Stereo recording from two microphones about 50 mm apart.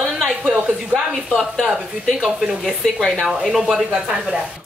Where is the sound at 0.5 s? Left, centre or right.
Right.